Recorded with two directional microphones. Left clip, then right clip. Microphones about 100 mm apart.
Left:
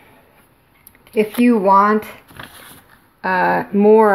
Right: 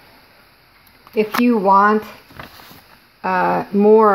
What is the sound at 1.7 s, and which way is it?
Speech, 20° left (ahead or behind).